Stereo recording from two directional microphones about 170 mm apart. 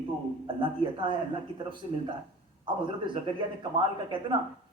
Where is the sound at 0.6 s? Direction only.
30° right (ahead or behind).